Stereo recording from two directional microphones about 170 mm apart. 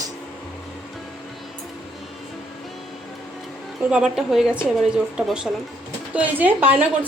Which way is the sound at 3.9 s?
5° right (ahead or behind).